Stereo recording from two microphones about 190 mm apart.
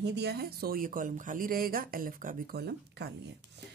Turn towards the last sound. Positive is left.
turn(degrees=-60)  # may be behind; listen again after turning